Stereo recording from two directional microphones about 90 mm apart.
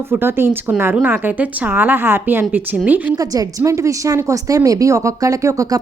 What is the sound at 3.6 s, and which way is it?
Speech, 35° right (ahead or behind).